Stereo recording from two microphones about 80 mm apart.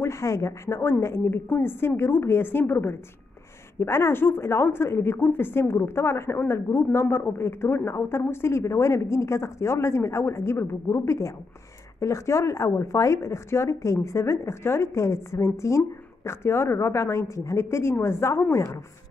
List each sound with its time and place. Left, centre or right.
0.0 s speech: left